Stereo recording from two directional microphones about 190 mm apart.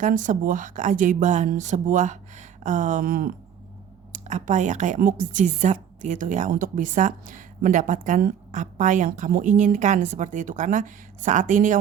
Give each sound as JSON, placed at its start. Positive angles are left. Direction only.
{"t": 0.0, "sound": "a woman's voice", "side_deg": -45}